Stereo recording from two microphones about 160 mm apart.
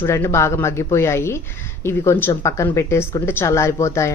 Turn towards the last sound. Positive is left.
turn(degrees=20)  # may be behind; listen again after turning